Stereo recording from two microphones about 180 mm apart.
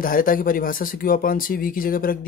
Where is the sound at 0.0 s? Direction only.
50° left (ahead or behind).